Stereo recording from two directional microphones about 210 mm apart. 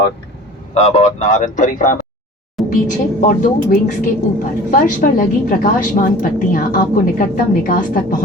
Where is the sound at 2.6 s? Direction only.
Centre (ahead or behind).